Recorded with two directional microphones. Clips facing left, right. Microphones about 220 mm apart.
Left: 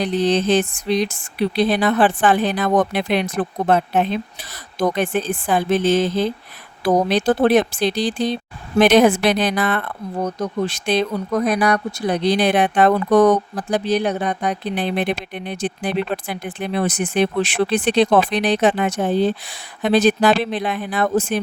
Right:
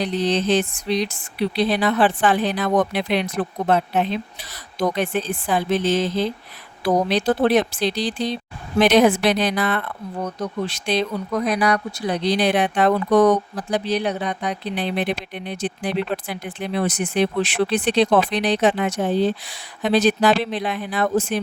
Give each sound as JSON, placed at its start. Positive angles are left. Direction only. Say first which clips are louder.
{"t": 0.0, "sound": "speech", "louder": "left 3 dB", "side_deg": 50}